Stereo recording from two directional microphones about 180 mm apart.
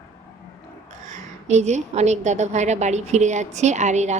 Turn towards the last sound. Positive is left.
turn(degrees=-40)  # may be behind; listen again after turning